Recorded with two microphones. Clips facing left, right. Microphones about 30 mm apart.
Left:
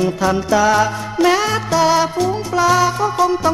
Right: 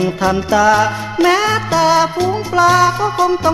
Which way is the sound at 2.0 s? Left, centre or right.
Right.